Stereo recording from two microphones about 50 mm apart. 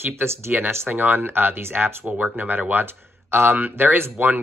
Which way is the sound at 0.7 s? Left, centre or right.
Right.